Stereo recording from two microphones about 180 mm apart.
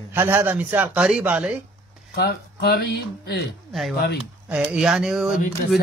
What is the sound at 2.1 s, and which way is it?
Speech, 60° left (ahead or behind).